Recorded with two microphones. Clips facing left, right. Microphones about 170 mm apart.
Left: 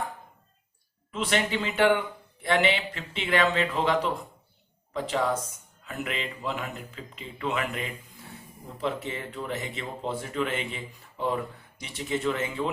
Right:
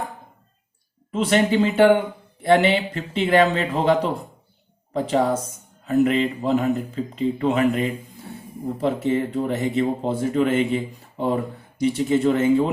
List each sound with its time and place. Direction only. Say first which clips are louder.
1.1 s speech: right 9 dB; 40° right (ahead or behind)